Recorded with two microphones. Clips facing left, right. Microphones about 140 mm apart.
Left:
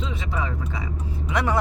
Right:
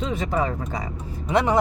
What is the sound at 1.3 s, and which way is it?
Speech, 20° right (ahead or behind).